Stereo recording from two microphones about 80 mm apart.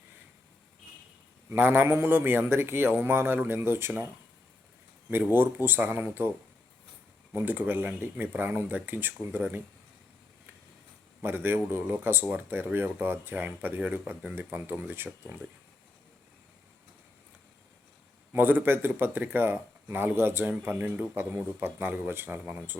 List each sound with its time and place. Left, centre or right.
1.5 s a man's voice: right
5.2 s a man's voice: right
7.3 s a man's voice: right
11.2 s a man's voice: right
18.3 s a man's voice: right